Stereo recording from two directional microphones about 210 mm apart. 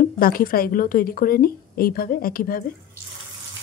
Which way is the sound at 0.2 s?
45° left (ahead or behind).